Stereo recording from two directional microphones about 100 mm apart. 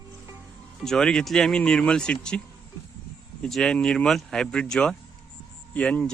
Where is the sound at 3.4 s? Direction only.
5° left (ahead or behind).